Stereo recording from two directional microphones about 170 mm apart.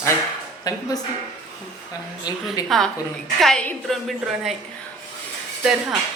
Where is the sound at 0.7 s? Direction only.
20° left (ahead or behind).